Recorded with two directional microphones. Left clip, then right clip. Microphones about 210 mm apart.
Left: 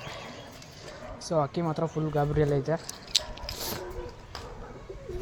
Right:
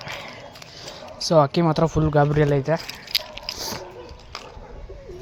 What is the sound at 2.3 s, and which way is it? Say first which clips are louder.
Speech: right 6 dB; 25° right (ahead or behind).